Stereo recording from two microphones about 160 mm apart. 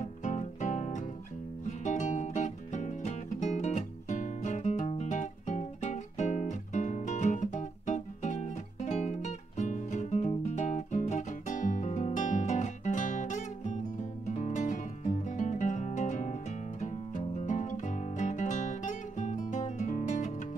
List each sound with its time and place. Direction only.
0.0 s music: 45° left (ahead or behind)